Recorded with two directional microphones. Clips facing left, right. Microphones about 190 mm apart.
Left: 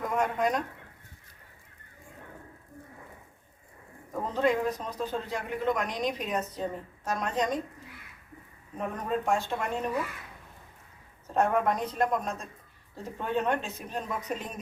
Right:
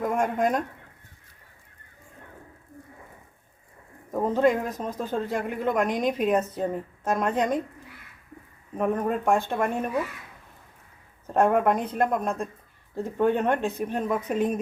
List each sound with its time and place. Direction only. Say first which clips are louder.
0.0 s speech: right 4 dB; 50° right (ahead or behind)
4.1 s a man's voice: right 5 dB; 50° right (ahead or behind)
8.8 s speech: right 6 dB; 55° right (ahead or behind)
11.3 s speech: right 5 dB; 55° right (ahead or behind)